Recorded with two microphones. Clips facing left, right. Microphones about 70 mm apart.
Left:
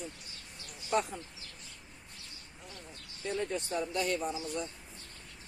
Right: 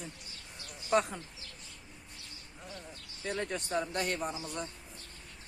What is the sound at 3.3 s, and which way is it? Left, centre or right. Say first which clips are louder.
Speech: left 1 dB; right.